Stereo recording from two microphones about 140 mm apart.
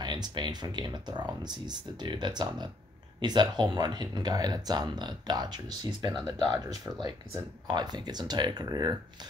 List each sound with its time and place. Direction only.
0.0 s speech: 30° right (ahead or behind)